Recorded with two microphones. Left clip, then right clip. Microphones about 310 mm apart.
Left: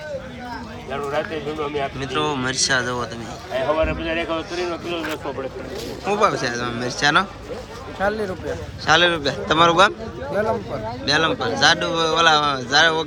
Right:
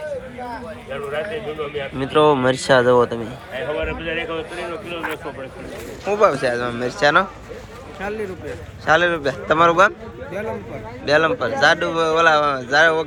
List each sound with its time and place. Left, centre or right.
0.9 s speech: left
2.1 s speech: centre
3.5 s speech: left
6.1 s speech: centre
8.9 s speech: centre
11.0 s speech: centre